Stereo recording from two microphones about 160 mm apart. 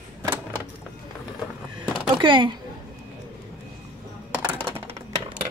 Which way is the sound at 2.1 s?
30° right (ahead or behind).